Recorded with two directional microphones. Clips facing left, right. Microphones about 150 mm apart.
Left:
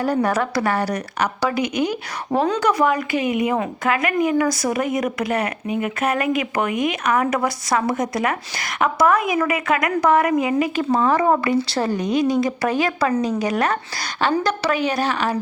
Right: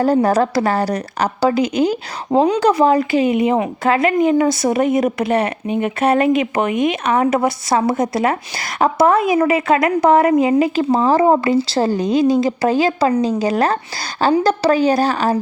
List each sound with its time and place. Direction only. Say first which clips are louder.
0.0 s a woman's voice: right 6 dB; 40° right (ahead or behind)